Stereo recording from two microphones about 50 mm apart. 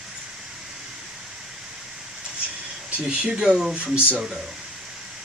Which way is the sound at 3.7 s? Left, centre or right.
Right.